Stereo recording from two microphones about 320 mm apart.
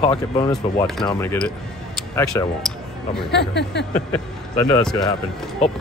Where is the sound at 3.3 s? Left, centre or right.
Left.